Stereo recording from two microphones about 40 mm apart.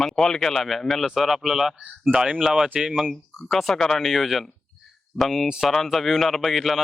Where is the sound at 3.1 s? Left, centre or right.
Centre.